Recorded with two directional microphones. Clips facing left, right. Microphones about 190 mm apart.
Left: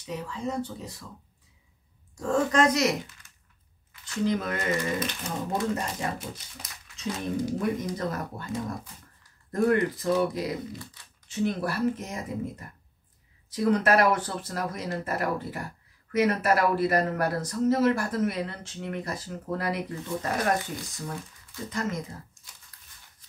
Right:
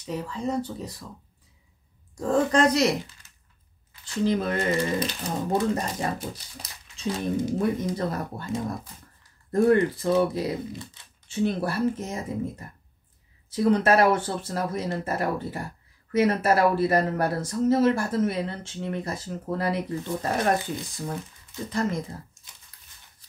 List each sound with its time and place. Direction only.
0.0 s speech: 35° right (ahead or behind)
2.1 s speech: 35° right (ahead or behind)
9.5 s speech: 30° right (ahead or behind)
22.4 s a sound: 20° right (ahead or behind)